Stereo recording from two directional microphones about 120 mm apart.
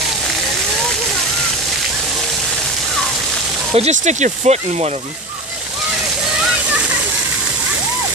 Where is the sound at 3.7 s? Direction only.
70° right (ahead or behind).